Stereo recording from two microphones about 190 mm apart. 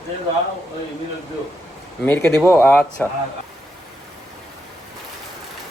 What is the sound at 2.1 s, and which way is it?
Speech, 10° left (ahead or behind).